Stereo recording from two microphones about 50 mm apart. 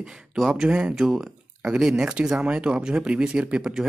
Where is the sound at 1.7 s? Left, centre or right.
Centre.